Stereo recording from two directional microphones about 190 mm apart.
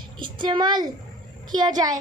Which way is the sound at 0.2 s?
25° right (ahead or behind).